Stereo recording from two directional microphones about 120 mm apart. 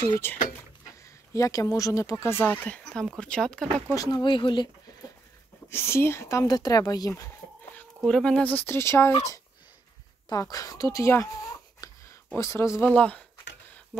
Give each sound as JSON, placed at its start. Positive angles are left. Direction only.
{"t": 0.0, "sound": "speech", "side_deg": 20}
{"t": 2.8, "sound": "speech", "side_deg": 5}
{"t": 3.9, "sound": "speech", "side_deg": 30}
{"t": 5.7, "sound": "speech", "side_deg": 20}
{"t": 8.0, "sound": "speech", "side_deg": 5}
{"t": 10.3, "sound": "speech", "side_deg": 30}
{"t": 12.9, "sound": "speech", "side_deg": 10}